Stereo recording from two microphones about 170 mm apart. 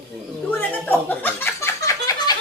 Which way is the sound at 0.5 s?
10° left (ahead or behind).